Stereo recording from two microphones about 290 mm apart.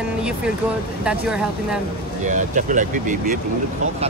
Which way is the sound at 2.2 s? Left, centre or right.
Right.